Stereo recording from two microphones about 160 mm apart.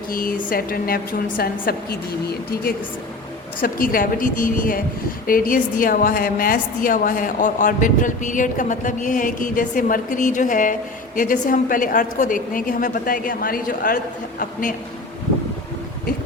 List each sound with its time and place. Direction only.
0.1 s a woman's voice: 60° left (ahead or behind)